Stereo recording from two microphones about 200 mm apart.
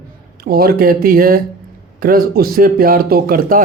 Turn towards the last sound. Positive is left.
turn(degrees=-45)  # may be behind; listen again after turning